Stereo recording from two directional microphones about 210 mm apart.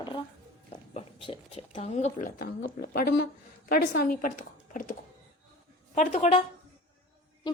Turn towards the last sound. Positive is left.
turn(degrees=20)  # may be behind; listen again after turning